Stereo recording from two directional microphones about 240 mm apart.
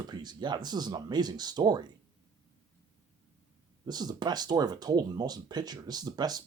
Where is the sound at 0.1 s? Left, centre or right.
Centre.